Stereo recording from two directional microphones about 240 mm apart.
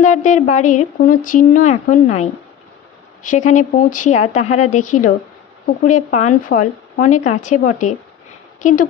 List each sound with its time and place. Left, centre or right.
0.0 s speech: left
3.3 s speech: left